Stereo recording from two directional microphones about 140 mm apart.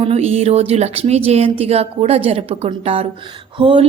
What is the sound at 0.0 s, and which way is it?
Speech, 45° right (ahead or behind).